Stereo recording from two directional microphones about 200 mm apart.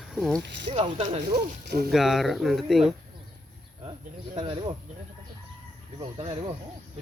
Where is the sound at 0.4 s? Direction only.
60° right (ahead or behind).